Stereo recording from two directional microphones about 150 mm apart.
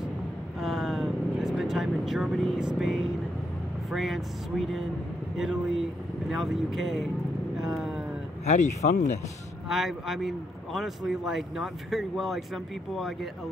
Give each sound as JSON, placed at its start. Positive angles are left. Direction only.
{"t": 0.6, "sound": "vehicle", "side_deg": 0}
{"t": 2.8, "sound": "a man's voice", "side_deg": 0}
{"t": 8.5, "sound": "speech", "side_deg": 50}
{"t": 9.7, "sound": "a man's voice", "side_deg": 0}